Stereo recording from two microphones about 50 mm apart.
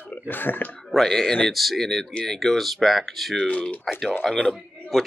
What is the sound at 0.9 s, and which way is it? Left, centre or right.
Speech, centre.